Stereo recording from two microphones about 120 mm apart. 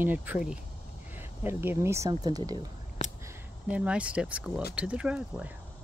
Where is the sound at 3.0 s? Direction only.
75° left (ahead or behind).